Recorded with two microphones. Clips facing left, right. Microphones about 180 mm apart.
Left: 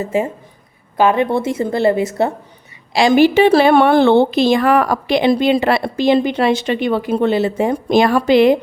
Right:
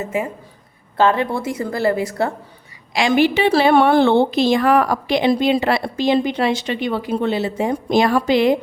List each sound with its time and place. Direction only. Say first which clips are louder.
0.0 s a woman's voice: left 4 dB; 30° left (ahead or behind)
0.9 s a woman's voice: left 3 dB; 15° left (ahead or behind)
2.9 s a woman's voice: left 5 dB; 35° left (ahead or behind); by 8.5 s 65° left (ahead or behind)